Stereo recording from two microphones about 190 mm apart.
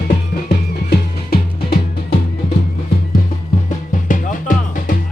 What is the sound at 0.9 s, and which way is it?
Music, 55° left (ahead or behind).